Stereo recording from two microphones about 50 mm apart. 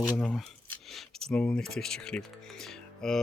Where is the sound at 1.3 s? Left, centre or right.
Centre.